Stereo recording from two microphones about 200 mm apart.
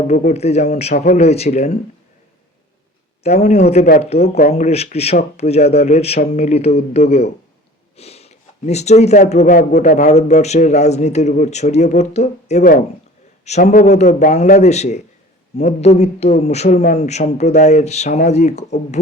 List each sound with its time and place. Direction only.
0.1 s a man's voice: 40° left (ahead or behind)
3.2 s a man's voice: 35° left (ahead or behind)